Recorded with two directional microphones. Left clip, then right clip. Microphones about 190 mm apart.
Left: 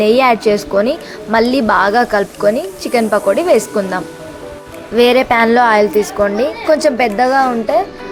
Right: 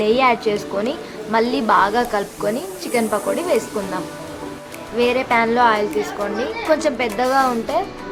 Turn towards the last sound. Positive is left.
turn(degrees=20)  # may be behind; listen again after turning